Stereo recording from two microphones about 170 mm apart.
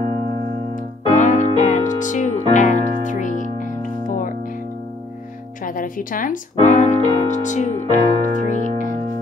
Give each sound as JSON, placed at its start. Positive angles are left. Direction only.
{"t": 1.1, "sound": "music", "side_deg": 45}
{"t": 5.7, "sound": "speech", "side_deg": 55}
{"t": 7.9, "sound": "music", "side_deg": 45}